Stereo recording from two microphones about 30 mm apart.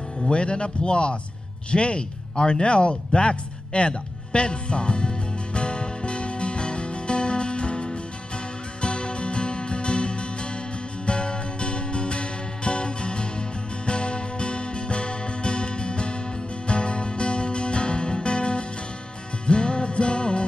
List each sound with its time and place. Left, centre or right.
0.2 s a man's voice: left
1.7 s a sound: left
8.8 s music: left